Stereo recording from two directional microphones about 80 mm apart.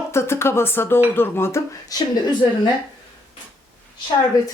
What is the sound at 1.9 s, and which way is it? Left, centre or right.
Speech, left.